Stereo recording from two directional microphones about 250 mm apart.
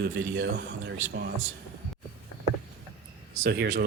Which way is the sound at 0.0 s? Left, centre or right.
Right.